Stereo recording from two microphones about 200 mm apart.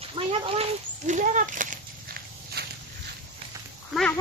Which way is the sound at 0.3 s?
30° right (ahead or behind).